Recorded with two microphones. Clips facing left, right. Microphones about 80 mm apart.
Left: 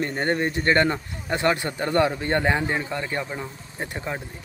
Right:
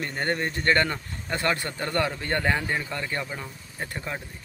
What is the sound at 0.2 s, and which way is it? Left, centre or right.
Speech, centre.